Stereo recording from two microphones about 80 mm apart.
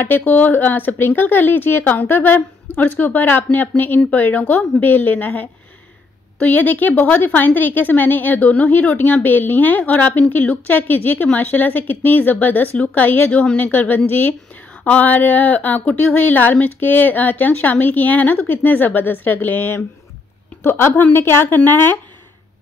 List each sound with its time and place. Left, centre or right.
0.0 s speech: left